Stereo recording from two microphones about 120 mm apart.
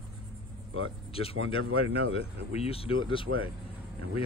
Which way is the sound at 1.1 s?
50° left (ahead or behind).